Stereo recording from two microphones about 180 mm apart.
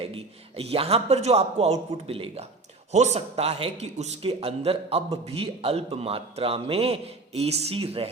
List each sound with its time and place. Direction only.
0.0 s a man's voice: 30° right (ahead or behind)